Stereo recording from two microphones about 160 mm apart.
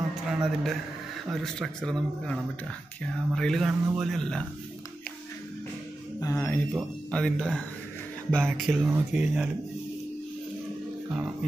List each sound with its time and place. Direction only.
0.1 s a sound: centre (ahead or behind)
1.3 s speech: 5° left (ahead or behind)
6.1 s speech: 15° left (ahead or behind)
7.1 s speech: 5° left (ahead or behind)
8.8 s speech: 10° right (ahead or behind)